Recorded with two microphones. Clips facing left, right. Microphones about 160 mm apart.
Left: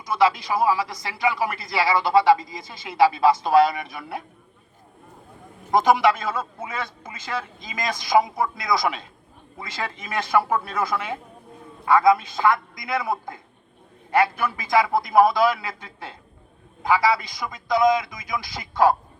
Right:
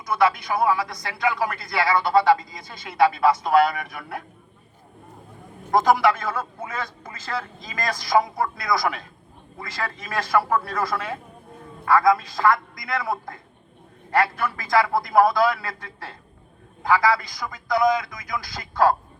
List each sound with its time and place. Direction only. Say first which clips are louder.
0.1 s speech: left 1 dB; 25° left (ahead or behind)
5.7 s speech: even; 20° left (ahead or behind)